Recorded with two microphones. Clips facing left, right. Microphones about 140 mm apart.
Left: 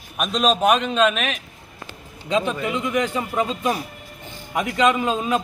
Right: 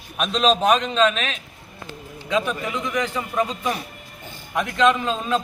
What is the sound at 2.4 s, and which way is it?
A man's voice, 20° left (ahead or behind).